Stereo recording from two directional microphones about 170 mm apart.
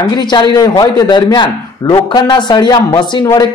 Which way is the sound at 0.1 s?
25° left (ahead or behind).